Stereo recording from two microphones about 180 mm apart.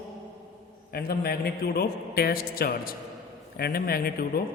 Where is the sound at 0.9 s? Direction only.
60° left (ahead or behind).